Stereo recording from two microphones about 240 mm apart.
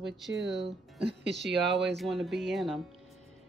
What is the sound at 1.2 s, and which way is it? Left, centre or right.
Speech, right.